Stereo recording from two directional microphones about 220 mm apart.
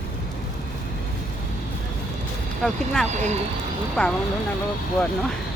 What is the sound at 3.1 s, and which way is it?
Speech, 30° right (ahead or behind).